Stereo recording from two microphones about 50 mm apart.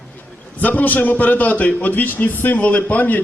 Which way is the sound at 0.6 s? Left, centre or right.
Left.